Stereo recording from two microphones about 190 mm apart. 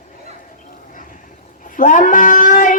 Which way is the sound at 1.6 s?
45° left (ahead or behind).